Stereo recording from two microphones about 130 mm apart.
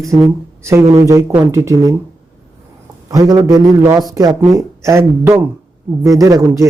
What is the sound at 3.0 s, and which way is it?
Speech, 30° right (ahead or behind).